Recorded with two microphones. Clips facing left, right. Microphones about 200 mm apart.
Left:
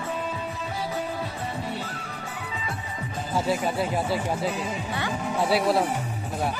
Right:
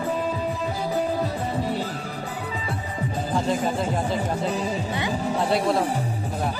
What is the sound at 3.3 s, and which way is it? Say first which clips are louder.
Speech: right 1 dB; 10° left (ahead or behind).